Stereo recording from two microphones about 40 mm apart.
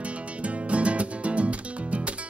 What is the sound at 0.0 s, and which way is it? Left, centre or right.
Music, right.